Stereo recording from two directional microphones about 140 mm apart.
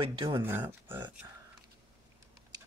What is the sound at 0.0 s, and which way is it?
Speech, 40° right (ahead or behind).